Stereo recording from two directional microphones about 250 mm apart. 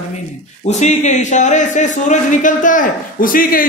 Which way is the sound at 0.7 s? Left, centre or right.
Left.